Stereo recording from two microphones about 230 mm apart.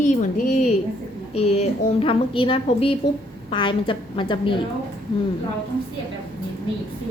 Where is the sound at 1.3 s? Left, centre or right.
Left.